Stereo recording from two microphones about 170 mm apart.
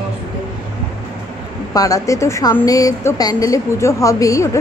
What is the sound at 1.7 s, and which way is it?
A woman's voice, 20° left (ahead or behind).